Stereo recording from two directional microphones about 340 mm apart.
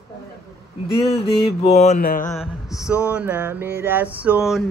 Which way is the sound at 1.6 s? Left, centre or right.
Centre.